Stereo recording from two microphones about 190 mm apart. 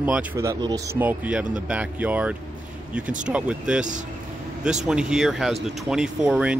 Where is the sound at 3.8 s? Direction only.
40° right (ahead or behind).